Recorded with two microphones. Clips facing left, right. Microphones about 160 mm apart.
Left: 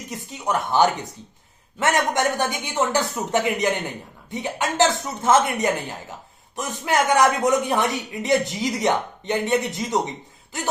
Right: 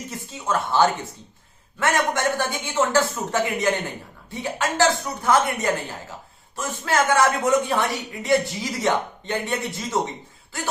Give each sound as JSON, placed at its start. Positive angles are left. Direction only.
{"t": 0.1, "sound": "speech", "side_deg": 15}